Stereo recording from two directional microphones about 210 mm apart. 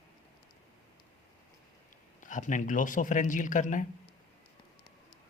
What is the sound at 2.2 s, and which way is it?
A man's voice, 35° left (ahead or behind).